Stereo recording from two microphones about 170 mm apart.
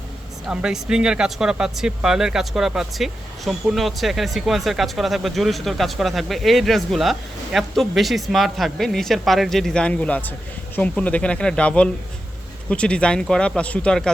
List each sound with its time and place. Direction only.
0.4 s speech: 5° right (ahead or behind)